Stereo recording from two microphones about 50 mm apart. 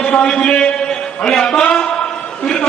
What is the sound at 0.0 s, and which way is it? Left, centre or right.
A man's voice, centre.